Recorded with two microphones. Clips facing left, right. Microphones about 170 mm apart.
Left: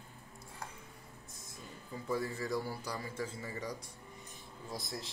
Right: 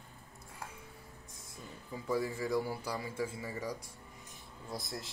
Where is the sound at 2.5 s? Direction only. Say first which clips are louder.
Right 3 dB; 10° right (ahead or behind).